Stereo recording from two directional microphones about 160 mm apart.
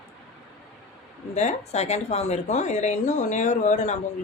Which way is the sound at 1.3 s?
45° left (ahead or behind).